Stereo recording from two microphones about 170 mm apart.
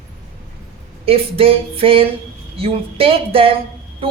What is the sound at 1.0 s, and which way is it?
A woman's voice, 35° right (ahead or behind).